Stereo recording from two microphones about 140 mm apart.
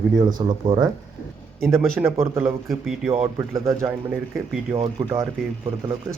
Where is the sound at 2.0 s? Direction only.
20° right (ahead or behind).